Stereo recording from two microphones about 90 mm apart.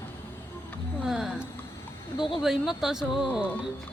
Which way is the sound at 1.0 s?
5° right (ahead or behind).